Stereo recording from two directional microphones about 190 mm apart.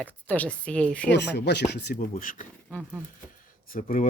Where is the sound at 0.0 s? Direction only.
10° left (ahead or behind).